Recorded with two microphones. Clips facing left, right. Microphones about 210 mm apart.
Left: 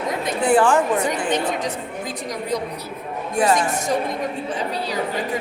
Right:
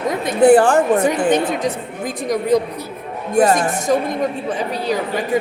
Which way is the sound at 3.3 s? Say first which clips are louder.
Right 4 dB; 45° right (ahead or behind).